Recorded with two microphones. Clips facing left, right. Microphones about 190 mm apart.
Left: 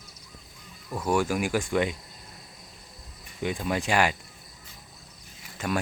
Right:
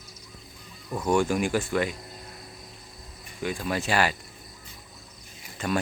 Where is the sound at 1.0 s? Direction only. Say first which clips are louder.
Right 2 dB; 5° left (ahead or behind).